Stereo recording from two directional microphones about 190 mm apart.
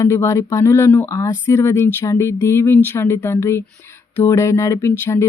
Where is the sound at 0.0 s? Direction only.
15° left (ahead or behind).